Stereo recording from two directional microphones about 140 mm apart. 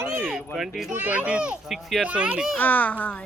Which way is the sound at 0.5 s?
Centre (ahead or behind).